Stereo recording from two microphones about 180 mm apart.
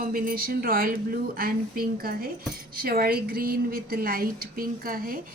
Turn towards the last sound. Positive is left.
turn(degrees=-50)  # may be behind; listen again after turning